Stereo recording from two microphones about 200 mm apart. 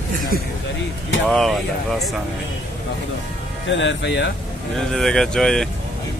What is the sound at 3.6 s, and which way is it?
Speech, 65° left (ahead or behind).